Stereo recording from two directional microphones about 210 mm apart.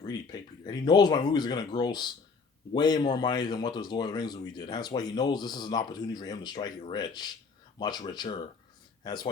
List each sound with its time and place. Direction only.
0.0 s speech: 20° left (ahead or behind)